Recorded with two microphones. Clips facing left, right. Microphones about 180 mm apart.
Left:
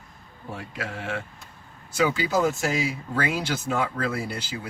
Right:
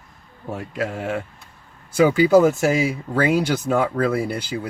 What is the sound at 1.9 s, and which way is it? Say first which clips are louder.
Speech: right 9 dB; 55° right (ahead or behind).